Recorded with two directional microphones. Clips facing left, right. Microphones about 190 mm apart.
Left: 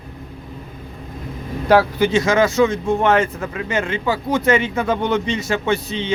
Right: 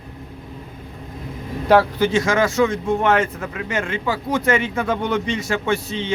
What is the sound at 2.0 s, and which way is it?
Speech, 20° left (ahead or behind).